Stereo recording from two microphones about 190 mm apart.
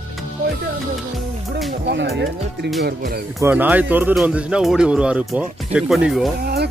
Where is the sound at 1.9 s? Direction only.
65° right (ahead or behind).